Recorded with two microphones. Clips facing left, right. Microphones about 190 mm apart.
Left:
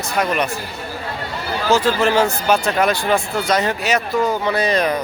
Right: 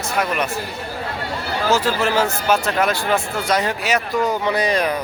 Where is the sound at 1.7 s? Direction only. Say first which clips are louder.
Left 4 dB; 5° right (ahead or behind).